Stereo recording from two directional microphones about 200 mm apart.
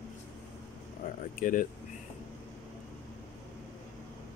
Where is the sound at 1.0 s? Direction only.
45° left (ahead or behind).